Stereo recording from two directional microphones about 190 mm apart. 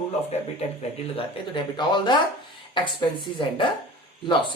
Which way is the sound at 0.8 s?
25° left (ahead or behind).